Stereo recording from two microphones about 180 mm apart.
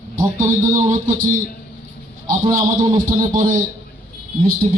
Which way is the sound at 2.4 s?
30° right (ahead or behind).